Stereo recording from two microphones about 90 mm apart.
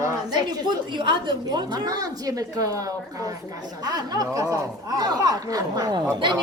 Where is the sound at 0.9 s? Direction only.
60° right (ahead or behind); by 6.0 s 45° right (ahead or behind).